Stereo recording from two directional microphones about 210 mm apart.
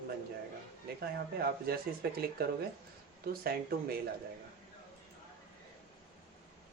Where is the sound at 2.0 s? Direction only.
50° right (ahead or behind).